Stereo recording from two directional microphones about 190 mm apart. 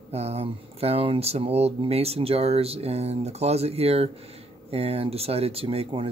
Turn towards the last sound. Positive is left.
turn(degrees=-30)  # may be behind; listen again after turning